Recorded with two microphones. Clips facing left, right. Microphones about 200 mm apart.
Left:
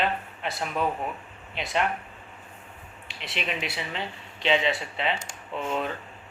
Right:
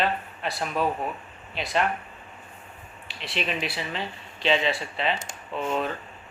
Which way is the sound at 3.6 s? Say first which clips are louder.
Right 1 dB; 20° left (ahead or behind).